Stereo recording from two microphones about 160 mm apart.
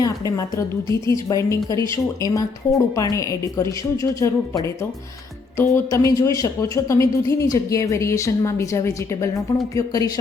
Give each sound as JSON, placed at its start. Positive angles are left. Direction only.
{"t": 0.0, "sound": "speech", "side_deg": 20}